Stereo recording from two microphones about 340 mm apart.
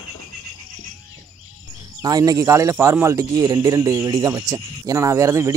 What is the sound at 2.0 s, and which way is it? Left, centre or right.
Speech, centre.